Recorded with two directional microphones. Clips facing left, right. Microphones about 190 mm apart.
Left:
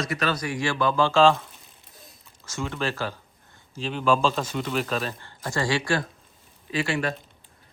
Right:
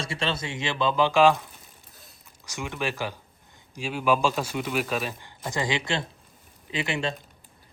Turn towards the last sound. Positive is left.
turn(degrees=-20)  # may be behind; listen again after turning